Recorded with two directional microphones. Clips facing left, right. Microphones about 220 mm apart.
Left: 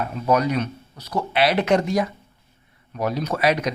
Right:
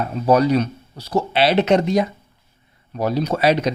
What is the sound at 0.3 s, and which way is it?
Speech, 30° right (ahead or behind).